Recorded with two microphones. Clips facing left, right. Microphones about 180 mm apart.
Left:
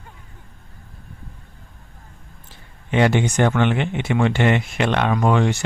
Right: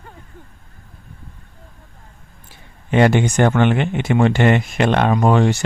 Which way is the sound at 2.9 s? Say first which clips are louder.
Right 3 dB; 45° right (ahead or behind).